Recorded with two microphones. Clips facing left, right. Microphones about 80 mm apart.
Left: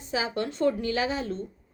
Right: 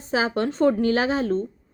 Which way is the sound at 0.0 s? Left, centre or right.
Right.